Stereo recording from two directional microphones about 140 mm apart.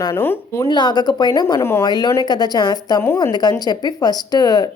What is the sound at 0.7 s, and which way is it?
A woman's voice, 30° left (ahead or behind).